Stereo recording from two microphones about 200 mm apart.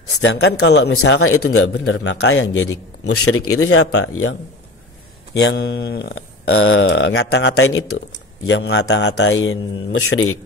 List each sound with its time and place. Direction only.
0.2 s a man's voice: 60° left (ahead or behind); by 2.7 s 75° left (ahead or behind)
3.3 s speech: 90° left
5.3 s speech: 55° left (ahead or behind); by 8.0 s 90° left
8.5 s a man's voice: 60° left (ahead or behind); by 10.3 s 90° left